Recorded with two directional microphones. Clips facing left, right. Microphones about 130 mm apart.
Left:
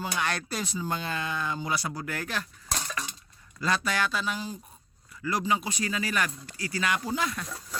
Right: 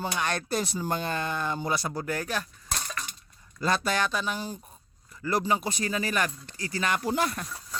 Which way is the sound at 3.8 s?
20° right (ahead or behind).